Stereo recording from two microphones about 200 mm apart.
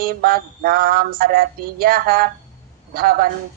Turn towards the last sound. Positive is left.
turn(degrees=-50)  # may be behind; listen again after turning